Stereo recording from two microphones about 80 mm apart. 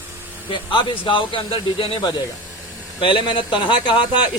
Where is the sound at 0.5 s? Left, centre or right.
Left.